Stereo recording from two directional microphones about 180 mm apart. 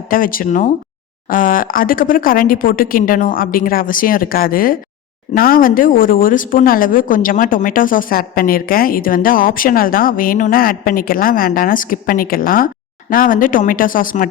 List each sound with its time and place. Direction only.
0.1 s speech: 50° left (ahead or behind)